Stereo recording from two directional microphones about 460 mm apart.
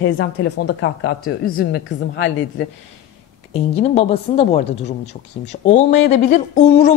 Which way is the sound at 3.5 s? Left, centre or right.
Centre.